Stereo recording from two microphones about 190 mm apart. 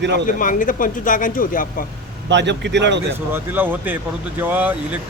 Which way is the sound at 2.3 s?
65° right (ahead or behind).